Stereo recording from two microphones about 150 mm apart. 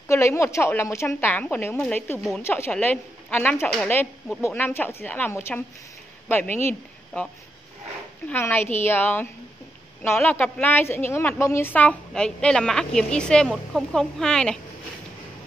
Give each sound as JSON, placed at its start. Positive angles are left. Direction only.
{"t": 0.1, "sound": "a woman's voice", "side_deg": 20}
{"t": 8.3, "sound": "a woman's voice", "side_deg": 15}